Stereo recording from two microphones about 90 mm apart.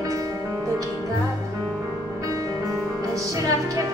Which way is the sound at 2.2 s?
40° right (ahead or behind).